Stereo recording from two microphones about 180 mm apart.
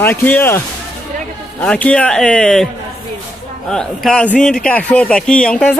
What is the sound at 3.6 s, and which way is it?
Speech, 5° left (ahead or behind).